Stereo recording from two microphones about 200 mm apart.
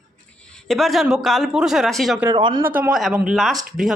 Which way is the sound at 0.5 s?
Centre (ahead or behind).